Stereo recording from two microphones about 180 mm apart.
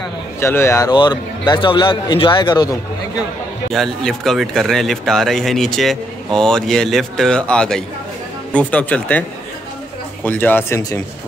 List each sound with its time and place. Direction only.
0.4 s a man's voice: 15° left (ahead or behind)
3.7 s a man's voice: centre (ahead or behind)
10.2 s speech: 10° left (ahead or behind)